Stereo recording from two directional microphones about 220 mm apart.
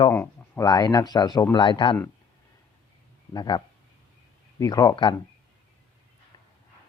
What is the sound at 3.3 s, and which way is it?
Speech, 20° left (ahead or behind).